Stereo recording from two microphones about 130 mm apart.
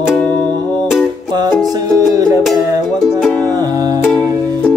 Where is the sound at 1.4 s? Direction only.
25° right (ahead or behind).